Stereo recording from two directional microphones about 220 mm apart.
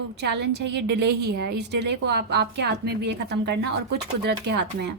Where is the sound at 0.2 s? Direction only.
50° right (ahead or behind).